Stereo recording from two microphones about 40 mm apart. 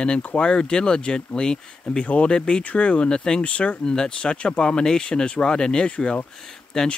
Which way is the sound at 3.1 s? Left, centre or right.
Centre.